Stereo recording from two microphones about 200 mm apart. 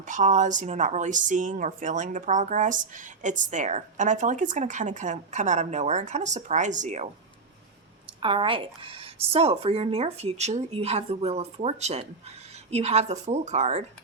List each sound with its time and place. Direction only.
0.0 s speech: 40° right (ahead or behind)
8.2 s speech: 25° right (ahead or behind)